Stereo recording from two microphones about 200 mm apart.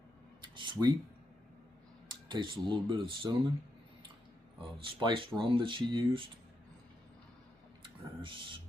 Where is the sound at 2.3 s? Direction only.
25° right (ahead or behind).